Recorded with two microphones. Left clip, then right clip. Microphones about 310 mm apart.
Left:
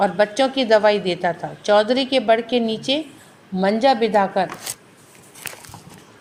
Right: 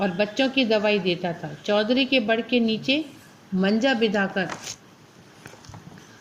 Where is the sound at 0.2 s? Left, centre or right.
Centre.